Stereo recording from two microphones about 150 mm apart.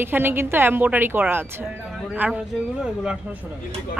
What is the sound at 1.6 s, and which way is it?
Speech, 5° right (ahead or behind).